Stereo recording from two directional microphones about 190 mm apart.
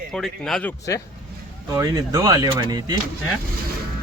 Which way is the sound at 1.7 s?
20° right (ahead or behind).